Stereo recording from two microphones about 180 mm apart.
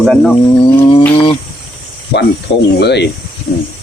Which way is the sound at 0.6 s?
30° left (ahead or behind).